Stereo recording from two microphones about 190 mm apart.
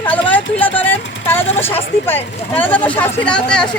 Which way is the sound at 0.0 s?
10° left (ahead or behind).